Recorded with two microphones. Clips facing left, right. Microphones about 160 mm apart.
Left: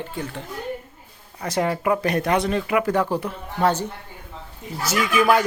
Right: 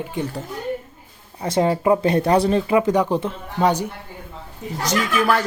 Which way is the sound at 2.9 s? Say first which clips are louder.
Right 3 dB; 20° right (ahead or behind).